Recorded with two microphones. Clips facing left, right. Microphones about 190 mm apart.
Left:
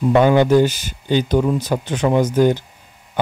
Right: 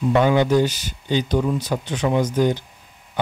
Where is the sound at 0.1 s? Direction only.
55° left (ahead or behind).